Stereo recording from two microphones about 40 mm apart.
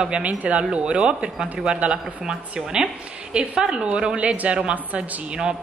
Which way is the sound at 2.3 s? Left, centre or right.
Centre.